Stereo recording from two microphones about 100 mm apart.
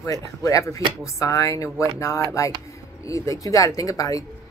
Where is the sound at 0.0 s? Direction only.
35° left (ahead or behind).